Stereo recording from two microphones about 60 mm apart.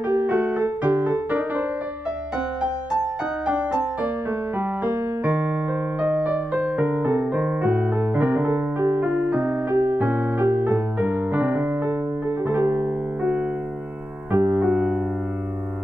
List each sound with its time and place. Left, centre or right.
0.0 s music: right
9.0 s music: right
12.4 s piano: right
13.2 s music: right